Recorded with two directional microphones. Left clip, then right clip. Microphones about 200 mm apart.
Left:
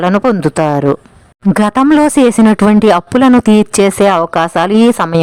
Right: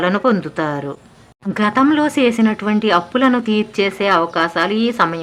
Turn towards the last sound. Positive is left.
turn(degrees=50)  # may be behind; listen again after turning